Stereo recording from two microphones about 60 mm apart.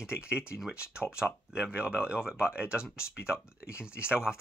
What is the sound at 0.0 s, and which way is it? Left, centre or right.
Speech, centre.